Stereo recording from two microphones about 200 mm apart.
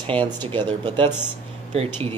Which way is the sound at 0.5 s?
20° right (ahead or behind).